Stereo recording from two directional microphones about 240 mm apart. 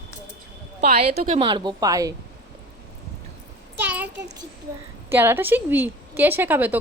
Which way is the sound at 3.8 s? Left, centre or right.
Centre.